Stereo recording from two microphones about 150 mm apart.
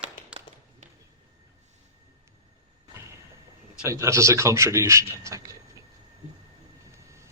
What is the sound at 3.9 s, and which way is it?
A man's voice, 20° right (ahead or behind).